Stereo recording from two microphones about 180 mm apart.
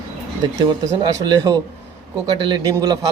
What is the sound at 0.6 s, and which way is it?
A man's voice, 25° right (ahead or behind).